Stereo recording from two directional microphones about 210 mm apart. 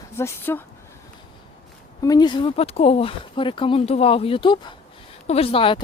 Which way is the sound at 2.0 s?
20° left (ahead or behind).